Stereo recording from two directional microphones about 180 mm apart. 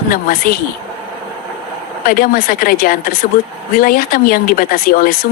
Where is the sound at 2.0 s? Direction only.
50° left (ahead or behind).